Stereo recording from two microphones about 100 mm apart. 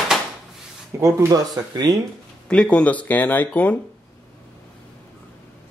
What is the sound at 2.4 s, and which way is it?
Speech, 10° left (ahead or behind).